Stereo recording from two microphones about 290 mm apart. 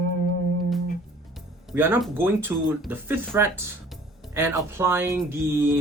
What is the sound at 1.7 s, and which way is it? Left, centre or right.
Speech, centre.